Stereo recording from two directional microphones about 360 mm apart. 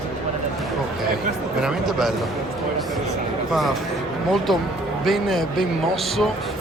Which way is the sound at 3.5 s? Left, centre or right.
Centre.